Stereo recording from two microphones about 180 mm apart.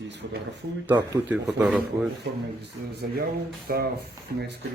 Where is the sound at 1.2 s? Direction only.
5° right (ahead or behind).